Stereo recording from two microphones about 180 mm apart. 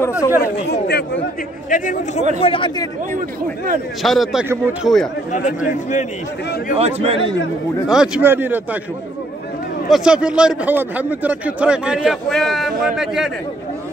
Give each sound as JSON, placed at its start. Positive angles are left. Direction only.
{"t": 0.0, "sound": "speech", "side_deg": 15}
{"t": 0.7, "sound": "speech", "side_deg": 65}
{"t": 1.7, "sound": "a man's voice", "side_deg": 45}
{"t": 2.4, "sound": "speech", "side_deg": 30}
{"t": 4.0, "sound": "a man's voice", "side_deg": 0}
{"t": 6.7, "sound": "speech", "side_deg": -35}
{"t": 7.9, "sound": "speech", "side_deg": -5}
{"t": 9.8, "sound": "a man's voice", "side_deg": -5}